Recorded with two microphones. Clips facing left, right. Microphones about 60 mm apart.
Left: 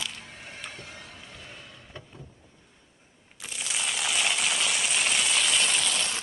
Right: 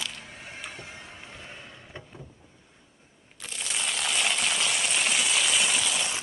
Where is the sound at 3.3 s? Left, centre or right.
Centre.